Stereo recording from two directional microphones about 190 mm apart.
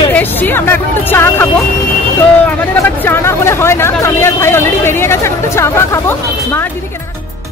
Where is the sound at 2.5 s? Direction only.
10° left (ahead or behind).